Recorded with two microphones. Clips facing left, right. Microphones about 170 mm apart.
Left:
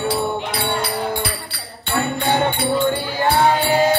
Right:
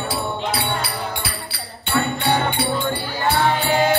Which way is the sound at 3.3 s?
45° left (ahead or behind).